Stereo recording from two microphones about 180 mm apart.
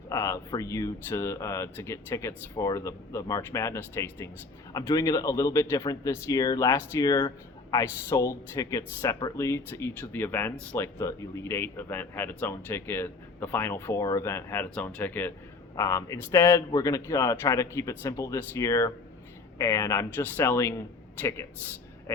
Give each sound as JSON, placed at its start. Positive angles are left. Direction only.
{"t": 0.1, "sound": "speech", "side_deg": 15}